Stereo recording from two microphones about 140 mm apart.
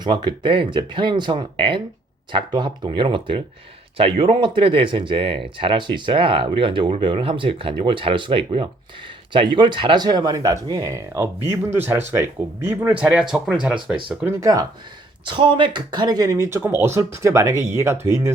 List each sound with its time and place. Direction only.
0.0 s speech: 35° right (ahead or behind); by 13.7 s 5° right (ahead or behind)
14.3 s speech: 25° right (ahead or behind)
15.2 s speech: 35° right (ahead or behind); by 18.3 s 20° right (ahead or behind)